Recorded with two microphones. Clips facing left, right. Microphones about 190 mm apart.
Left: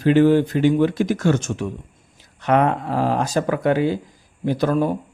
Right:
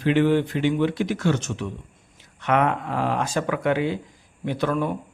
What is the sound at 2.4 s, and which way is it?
Speech, 35° left (ahead or behind).